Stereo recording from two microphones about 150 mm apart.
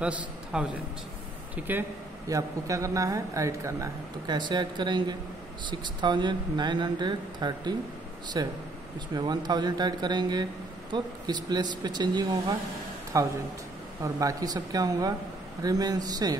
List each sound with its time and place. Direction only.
0.0 s a man's voice: 5° right (ahead or behind)
1.7 s a man's voice: 15° right (ahead or behind)